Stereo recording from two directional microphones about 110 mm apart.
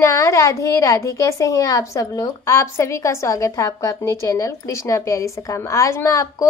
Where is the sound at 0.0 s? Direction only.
25° left (ahead or behind).